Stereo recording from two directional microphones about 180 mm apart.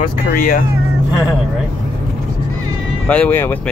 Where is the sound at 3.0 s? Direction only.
10° left (ahead or behind).